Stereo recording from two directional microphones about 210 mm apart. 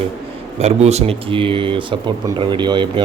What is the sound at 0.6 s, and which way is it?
Speech, 30° right (ahead or behind).